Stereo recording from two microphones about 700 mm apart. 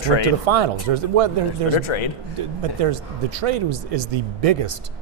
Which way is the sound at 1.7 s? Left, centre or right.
Left.